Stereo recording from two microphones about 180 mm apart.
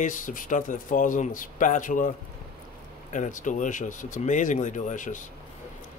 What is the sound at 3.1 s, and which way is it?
Speech, 45° left (ahead or behind).